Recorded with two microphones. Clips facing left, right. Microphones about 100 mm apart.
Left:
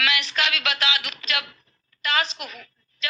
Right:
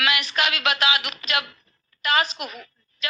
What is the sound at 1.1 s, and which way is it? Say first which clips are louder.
Speech: right 1 dB; 5° right (ahead or behind).